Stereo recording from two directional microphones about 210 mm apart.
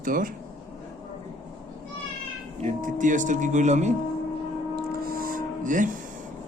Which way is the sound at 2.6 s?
40° right (ahead or behind).